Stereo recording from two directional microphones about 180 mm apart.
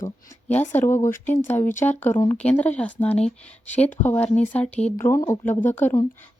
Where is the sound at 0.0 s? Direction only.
10° left (ahead or behind).